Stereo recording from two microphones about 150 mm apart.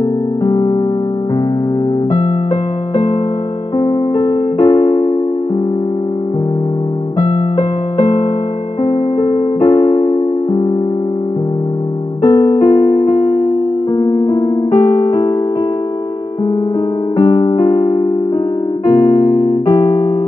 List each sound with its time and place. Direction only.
3.8 s electric piano: 30° left (ahead or behind)
7.2 s music: 40° left (ahead or behind)
9.6 s keyboard: 30° left (ahead or behind)
12.3 s electric piano: 25° left (ahead or behind)
13.9 s piano: 35° left (ahead or behind)
17.2 s electric piano: 30° left (ahead or behind)
18.9 s electric piano: 35° left (ahead or behind)
19.7 s electric piano: 20° left (ahead or behind)